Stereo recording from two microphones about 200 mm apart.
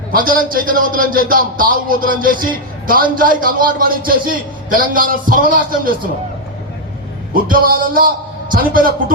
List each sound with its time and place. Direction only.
0.1 s a man's voice: 45° right (ahead or behind)
7.4 s a man's voice: 45° right (ahead or behind)